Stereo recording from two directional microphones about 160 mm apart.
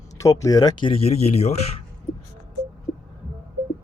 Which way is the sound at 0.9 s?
40° left (ahead or behind).